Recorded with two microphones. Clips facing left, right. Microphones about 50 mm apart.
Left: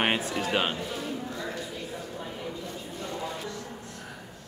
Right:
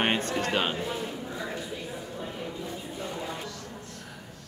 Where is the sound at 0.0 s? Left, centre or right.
Centre.